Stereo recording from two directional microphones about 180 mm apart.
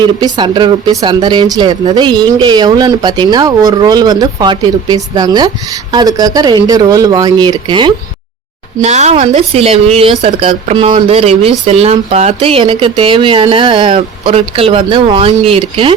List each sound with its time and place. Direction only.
0.3 s speech: 25° right (ahead or behind)
8.8 s a woman's voice: 40° right (ahead or behind)